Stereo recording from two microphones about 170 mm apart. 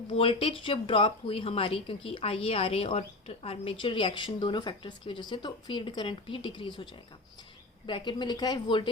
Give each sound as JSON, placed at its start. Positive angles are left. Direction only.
{"t": 0.1, "sound": "speech", "side_deg": 30}
{"t": 7.9, "sound": "a woman's voice", "side_deg": 25}